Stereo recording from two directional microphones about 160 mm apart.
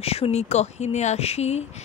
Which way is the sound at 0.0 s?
40° left (ahead or behind).